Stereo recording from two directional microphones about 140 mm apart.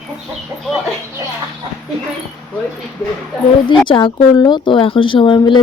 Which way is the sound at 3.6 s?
35° left (ahead or behind).